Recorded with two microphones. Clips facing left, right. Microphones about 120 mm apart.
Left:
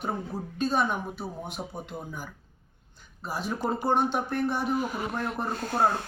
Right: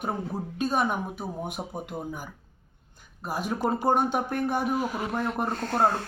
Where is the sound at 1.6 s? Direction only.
25° right (ahead or behind).